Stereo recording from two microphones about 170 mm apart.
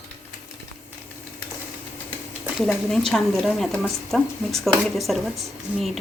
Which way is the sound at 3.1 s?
Centre (ahead or behind).